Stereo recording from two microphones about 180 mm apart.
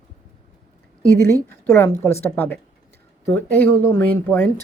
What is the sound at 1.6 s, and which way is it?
A woman's voice, 10° left (ahead or behind).